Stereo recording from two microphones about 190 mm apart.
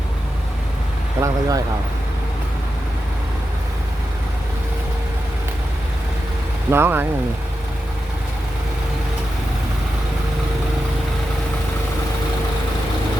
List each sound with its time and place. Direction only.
1.2 s speech: 20° right (ahead or behind)
6.7 s speech: 10° right (ahead or behind)